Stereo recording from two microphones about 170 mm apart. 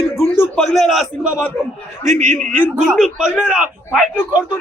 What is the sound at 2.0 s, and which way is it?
Speech, 45° right (ahead or behind).